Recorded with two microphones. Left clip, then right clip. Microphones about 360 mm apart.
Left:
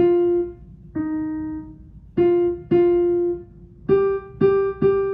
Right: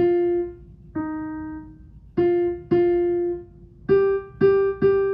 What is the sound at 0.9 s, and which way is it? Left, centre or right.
Piano, centre.